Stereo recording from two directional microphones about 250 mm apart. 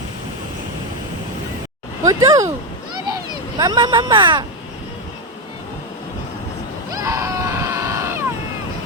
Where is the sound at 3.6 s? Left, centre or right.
Centre.